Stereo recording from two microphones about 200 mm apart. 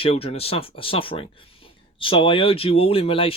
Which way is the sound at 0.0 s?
30° left (ahead or behind).